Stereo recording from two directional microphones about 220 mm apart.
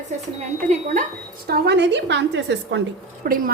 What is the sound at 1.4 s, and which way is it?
A woman's voice, 45° right (ahead or behind).